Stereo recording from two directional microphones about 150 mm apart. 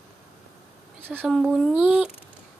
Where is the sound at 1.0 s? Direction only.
15° right (ahead or behind).